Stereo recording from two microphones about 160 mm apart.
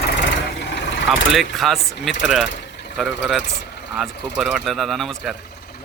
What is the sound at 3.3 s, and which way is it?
Speech, 90° left.